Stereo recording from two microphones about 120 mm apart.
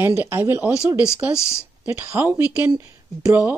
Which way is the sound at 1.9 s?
20° right (ahead or behind).